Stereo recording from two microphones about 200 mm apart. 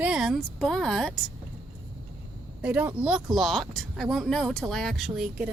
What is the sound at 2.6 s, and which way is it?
Speech, 5° right (ahead or behind).